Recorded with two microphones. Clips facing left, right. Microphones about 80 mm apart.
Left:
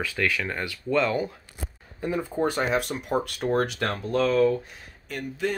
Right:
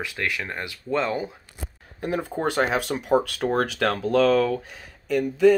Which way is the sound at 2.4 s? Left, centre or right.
Right.